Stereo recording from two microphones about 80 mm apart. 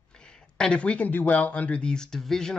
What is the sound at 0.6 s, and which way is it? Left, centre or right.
Speech, centre.